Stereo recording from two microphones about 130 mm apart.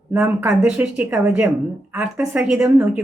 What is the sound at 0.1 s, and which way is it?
Speech, 15° right (ahead or behind).